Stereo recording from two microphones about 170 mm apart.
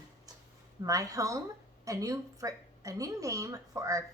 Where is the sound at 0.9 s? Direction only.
20° right (ahead or behind).